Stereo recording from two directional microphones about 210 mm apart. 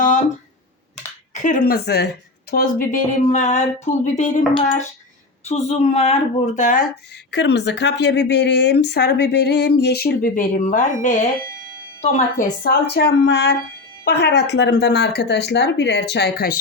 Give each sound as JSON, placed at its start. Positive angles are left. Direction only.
{"t": 1.3, "sound": "speech", "side_deg": 35}
{"t": 5.5, "sound": "speech", "side_deg": 30}
{"t": 7.3, "sound": "a woman's voice", "side_deg": 55}
{"t": 12.6, "sound": "a woman's voice", "side_deg": 50}